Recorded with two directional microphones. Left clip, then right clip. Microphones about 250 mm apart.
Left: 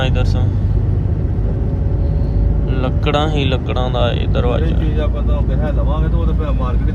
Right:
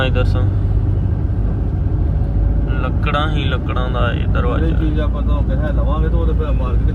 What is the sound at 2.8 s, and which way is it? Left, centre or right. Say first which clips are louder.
Speech: left 2 dB; centre.